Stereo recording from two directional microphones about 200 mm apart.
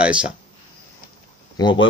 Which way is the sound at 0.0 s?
5° right (ahead or behind).